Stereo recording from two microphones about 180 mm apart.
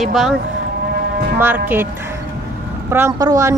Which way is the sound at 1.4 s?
10° right (ahead or behind).